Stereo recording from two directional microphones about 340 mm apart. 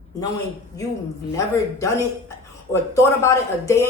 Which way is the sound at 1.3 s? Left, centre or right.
Centre.